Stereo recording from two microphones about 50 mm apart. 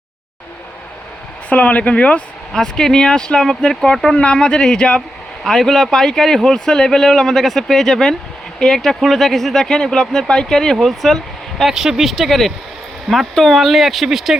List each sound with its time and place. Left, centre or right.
1.5 s speech: left
2.5 s speech: centre
5.4 s speech: centre
11.6 s speech: centre